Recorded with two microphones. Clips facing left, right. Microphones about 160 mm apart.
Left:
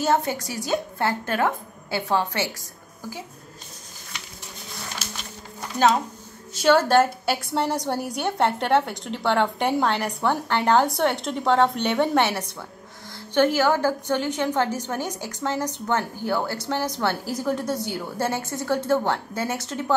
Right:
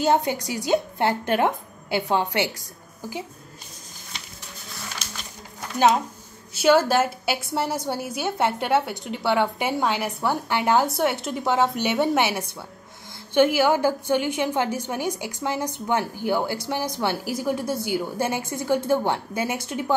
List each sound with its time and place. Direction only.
0.0 s a woman's voice: 15° right (ahead or behind)
6.5 s a woman's voice: 10° right (ahead or behind)